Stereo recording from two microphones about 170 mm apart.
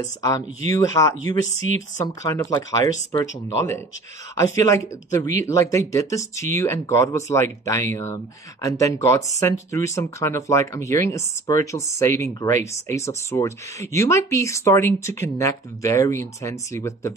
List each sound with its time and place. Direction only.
0.0 s speech: 20° left (ahead or behind)
2.2 s speech: 20° left (ahead or behind)